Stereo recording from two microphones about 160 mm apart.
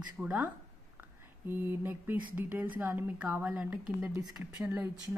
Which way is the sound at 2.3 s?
10° right (ahead or behind).